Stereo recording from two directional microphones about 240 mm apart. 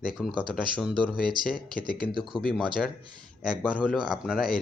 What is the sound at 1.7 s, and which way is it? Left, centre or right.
Speech, left.